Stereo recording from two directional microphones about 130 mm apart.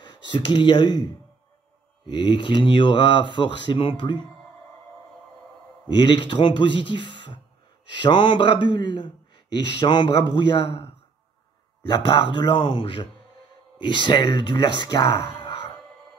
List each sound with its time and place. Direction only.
0.0 s speech: 40° left (ahead or behind)
2.0 s speech: 35° left (ahead or behind)
5.9 s speech: 35° left (ahead or behind)